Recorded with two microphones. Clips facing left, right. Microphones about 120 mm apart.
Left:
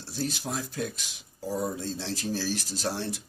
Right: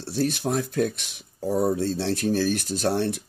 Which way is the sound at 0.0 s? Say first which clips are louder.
Right 8 dB; 60° right (ahead or behind).